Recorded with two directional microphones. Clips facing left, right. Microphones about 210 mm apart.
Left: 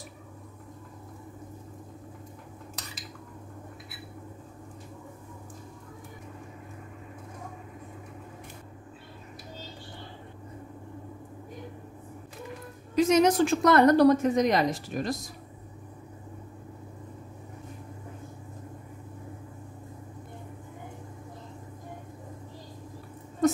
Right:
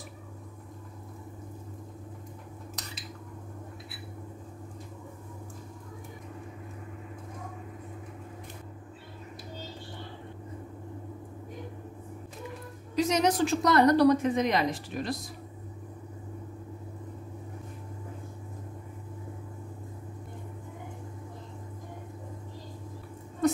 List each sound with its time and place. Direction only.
12.9 s a woman's voice: 50° left (ahead or behind)